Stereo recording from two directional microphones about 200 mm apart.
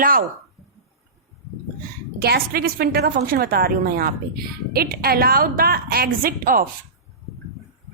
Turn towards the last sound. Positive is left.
turn(degrees=-45)  # may be behind; listen again after turning